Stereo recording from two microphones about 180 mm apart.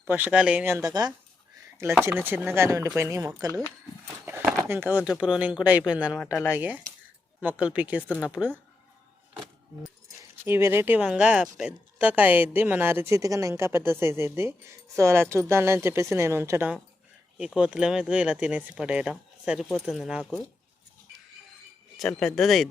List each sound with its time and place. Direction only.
0.0 s a woman's voice: 10° right (ahead or behind)
4.7 s a woman's voice: 10° right (ahead or behind)
6.2 s speech: 15° left (ahead or behind)
7.6 s a woman's voice: 5° right (ahead or behind)
10.4 s a woman's voice: 15° right (ahead or behind)
21.9 s speech: centre (ahead or behind)